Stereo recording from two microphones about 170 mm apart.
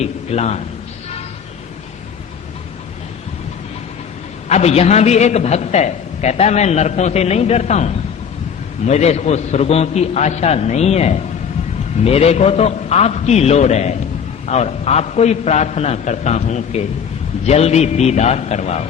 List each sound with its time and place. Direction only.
0.0 s a man's voice: 40° left (ahead or behind)
4.4 s a man's voice: 40° left (ahead or behind)